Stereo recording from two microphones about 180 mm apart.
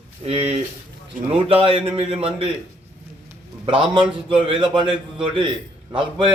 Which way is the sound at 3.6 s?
30° right (ahead or behind).